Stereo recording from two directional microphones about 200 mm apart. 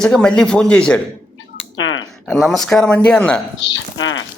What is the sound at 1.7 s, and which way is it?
Typing, 75° left (ahead or behind).